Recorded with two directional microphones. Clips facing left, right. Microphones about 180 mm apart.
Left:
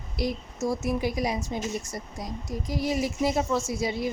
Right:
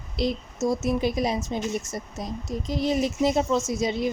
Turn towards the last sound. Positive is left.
turn(degrees=-20)  # may be behind; listen again after turning